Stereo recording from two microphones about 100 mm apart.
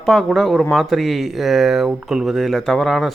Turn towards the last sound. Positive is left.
turn(degrees=0)  # may be behind; listen again after turning